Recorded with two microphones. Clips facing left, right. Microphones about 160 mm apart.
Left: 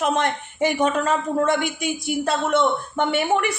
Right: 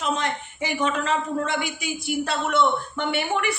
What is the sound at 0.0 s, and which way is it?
Speech, 50° left (ahead or behind).